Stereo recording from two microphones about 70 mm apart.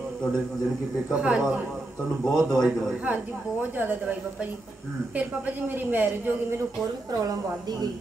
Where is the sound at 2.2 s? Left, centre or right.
Centre.